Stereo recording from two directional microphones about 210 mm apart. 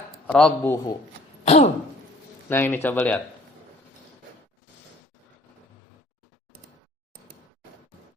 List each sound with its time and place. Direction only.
0.3 s a man's voice: 5° left (ahead or behind)
1.5 s throat clearing: 30° left (ahead or behind)
2.5 s a man's voice: 10° left (ahead or behind)